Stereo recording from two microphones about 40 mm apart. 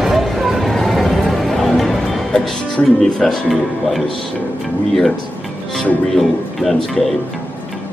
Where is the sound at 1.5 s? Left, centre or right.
Centre.